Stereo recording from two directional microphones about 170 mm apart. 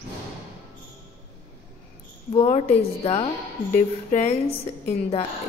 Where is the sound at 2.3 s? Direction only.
40° left (ahead or behind).